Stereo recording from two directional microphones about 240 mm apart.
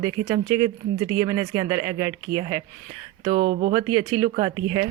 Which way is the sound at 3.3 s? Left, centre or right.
Right.